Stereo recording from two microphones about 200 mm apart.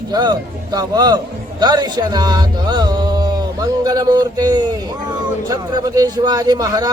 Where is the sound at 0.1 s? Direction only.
20° right (ahead or behind).